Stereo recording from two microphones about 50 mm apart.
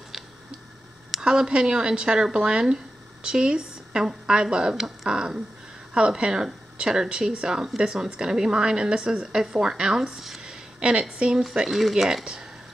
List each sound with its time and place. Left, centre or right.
1.2 s speech: centre